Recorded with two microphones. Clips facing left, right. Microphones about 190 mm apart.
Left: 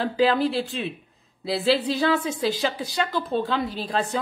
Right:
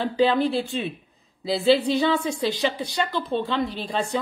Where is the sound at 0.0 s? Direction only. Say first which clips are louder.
Even; centre (ahead or behind).